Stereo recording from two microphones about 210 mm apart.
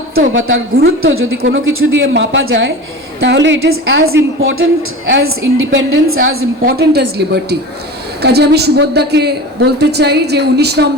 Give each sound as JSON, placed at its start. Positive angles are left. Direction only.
{"t": 0.3, "sound": "a woman's voice", "side_deg": -70}
{"t": 1.4, "sound": "speech", "side_deg": -60}
{"t": 4.4, "sound": "a woman's voice", "side_deg": -65}
{"t": 6.7, "sound": "a woman's voice", "side_deg": -50}